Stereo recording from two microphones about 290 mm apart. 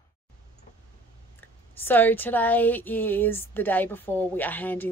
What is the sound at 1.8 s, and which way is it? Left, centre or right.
A woman's voice, centre.